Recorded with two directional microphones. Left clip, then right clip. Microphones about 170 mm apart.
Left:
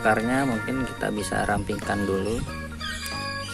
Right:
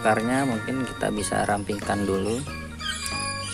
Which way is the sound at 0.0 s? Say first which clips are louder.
Even; centre (ahead or behind).